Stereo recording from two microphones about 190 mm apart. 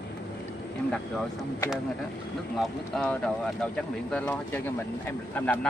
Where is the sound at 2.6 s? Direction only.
5° left (ahead or behind).